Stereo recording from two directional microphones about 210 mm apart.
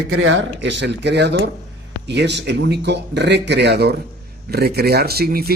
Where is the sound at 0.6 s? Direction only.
60° right (ahead or behind).